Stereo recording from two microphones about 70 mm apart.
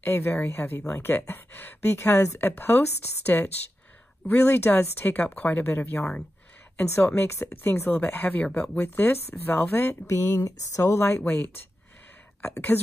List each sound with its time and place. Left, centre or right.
0.0 s speech: left
10.0 s speech: left